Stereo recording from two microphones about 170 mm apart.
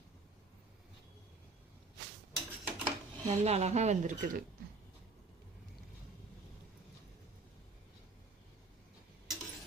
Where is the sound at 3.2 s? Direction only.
40° right (ahead or behind).